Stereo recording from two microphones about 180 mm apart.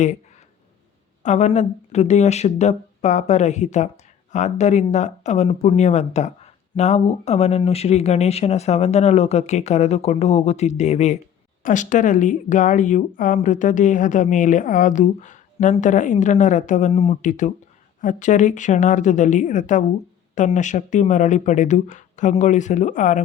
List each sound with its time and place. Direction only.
1.2 s speech: 40° left (ahead or behind)